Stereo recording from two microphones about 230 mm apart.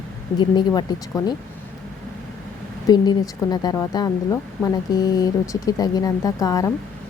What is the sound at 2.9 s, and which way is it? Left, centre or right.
A woman's voice, centre.